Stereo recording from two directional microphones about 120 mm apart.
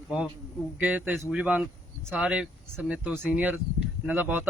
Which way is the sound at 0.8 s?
15° right (ahead or behind).